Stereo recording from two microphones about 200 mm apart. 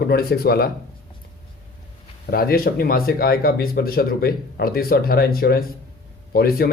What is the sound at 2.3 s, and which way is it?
Speech, 50° left (ahead or behind).